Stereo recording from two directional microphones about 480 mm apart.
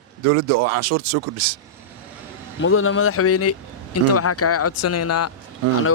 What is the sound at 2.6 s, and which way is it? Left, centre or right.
Speech, left.